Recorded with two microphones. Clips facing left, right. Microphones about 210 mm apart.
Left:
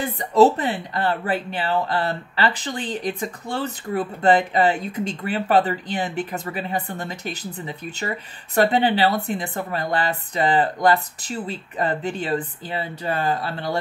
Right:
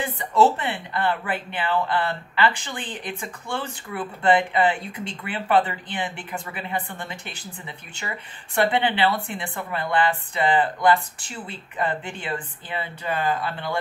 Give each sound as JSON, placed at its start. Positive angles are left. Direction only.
{"t": 0.0, "sound": "speech", "side_deg": 40}